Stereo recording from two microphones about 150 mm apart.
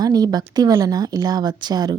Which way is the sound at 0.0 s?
25° right (ahead or behind).